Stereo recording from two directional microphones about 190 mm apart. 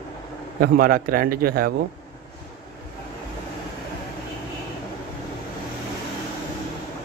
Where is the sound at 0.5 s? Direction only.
50° right (ahead or behind).